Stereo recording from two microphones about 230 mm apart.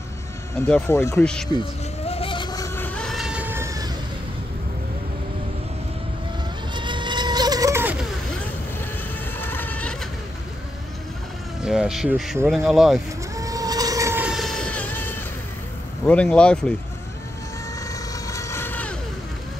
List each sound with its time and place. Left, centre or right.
0.6 s speech: centre
2.0 s a sound: left; by 3.9 s centre
6.7 s vehicle: centre
9.4 s a sound: centre
11.6 s speech: centre
13.4 s vehicle: centre
16.1 s speech: centre
18.2 s vehicle: centre